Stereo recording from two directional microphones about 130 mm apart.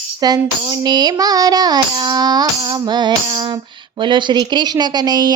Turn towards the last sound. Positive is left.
turn(degrees=-30)  # may be behind; listen again after turning